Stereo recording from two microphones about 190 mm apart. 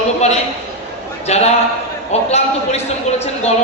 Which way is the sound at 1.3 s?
35° left (ahead or behind).